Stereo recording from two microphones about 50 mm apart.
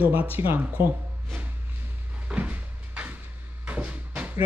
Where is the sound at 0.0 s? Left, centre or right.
Right.